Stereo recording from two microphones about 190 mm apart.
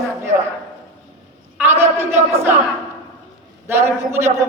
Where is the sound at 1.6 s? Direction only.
10° right (ahead or behind).